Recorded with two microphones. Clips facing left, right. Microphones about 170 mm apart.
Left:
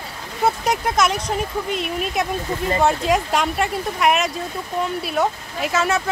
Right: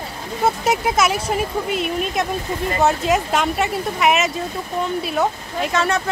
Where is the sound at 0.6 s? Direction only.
5° right (ahead or behind).